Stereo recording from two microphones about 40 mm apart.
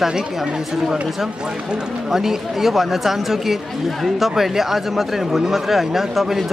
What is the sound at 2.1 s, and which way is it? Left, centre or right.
Speech, centre.